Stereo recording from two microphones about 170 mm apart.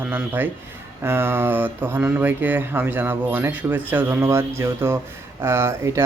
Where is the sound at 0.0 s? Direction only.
10° right (ahead or behind).